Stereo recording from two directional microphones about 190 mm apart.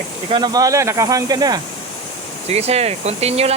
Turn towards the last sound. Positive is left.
turn(degrees=-35)  # may be behind; listen again after turning